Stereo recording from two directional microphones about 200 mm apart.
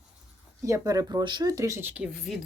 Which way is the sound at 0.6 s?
15° right (ahead or behind).